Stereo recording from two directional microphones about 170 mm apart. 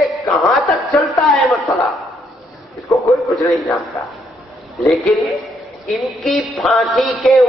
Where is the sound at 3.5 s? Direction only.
Centre (ahead or behind).